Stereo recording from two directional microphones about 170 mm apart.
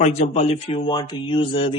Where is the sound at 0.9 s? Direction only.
30° left (ahead or behind).